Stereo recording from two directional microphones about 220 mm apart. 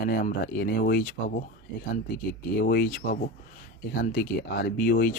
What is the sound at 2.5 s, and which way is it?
Speech, 45° left (ahead or behind).